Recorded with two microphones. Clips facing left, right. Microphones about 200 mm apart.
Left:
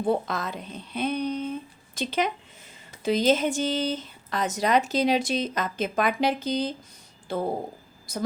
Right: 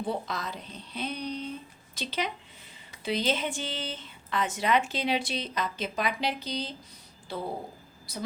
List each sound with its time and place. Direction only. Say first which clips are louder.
0.0 s speech: left 7 dB; 50° left (ahead or behind)